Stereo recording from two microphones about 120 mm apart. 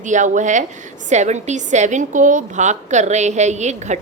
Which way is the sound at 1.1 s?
75° right (ahead or behind).